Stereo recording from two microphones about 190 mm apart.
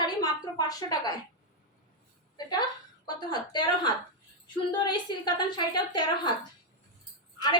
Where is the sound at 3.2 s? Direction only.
20° left (ahead or behind).